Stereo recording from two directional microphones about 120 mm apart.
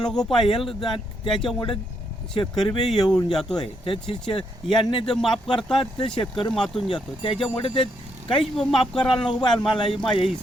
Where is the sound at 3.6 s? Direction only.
50° left (ahead or behind).